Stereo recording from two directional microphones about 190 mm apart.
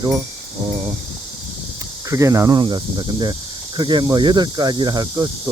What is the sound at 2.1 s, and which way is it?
Speech, 15° right (ahead or behind).